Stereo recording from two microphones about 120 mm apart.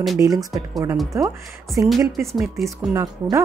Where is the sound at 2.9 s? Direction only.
30° right (ahead or behind).